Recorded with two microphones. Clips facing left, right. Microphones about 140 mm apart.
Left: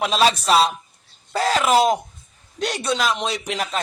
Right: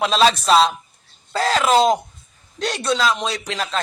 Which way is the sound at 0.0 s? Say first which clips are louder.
Right 2 dB; 10° left (ahead or behind).